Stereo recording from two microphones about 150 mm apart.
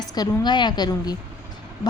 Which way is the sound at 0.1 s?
30° left (ahead or behind).